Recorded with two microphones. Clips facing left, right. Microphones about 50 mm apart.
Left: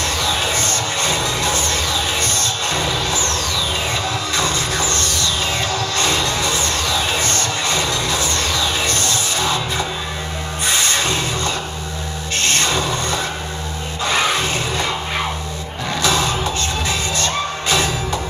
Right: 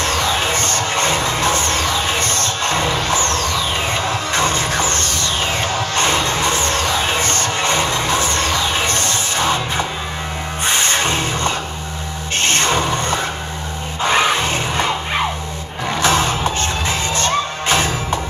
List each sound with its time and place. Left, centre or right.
0.0 s music: right
12.4 s a sound: right
15.9 s music: right